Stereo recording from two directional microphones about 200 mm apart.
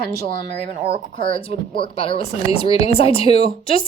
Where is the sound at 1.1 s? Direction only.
25° left (ahead or behind).